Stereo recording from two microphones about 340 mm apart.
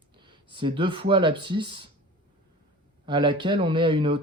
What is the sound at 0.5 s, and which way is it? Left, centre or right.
Speech, centre.